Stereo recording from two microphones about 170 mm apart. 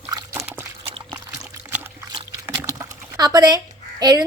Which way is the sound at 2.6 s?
20° right (ahead or behind).